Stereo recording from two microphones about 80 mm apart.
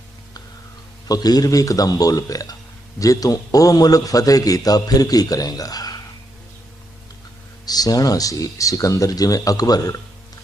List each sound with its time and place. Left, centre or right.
1.0 s a man's voice: left
7.6 s a man's voice: left